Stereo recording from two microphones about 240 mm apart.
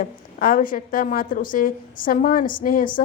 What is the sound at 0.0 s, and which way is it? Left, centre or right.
A woman's voice, left.